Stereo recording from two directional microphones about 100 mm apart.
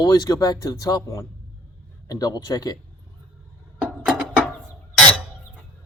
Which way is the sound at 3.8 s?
10° right (ahead or behind).